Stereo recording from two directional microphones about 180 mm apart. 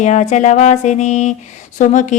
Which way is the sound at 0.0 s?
40° left (ahead or behind).